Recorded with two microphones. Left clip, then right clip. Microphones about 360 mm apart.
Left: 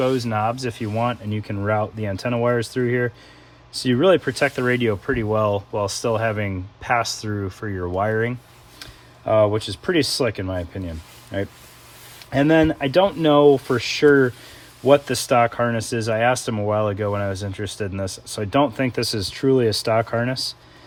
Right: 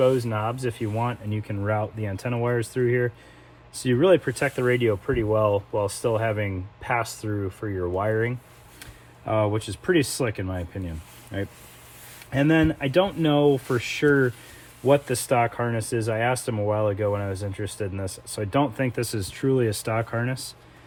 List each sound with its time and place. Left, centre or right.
0.0 s speech: left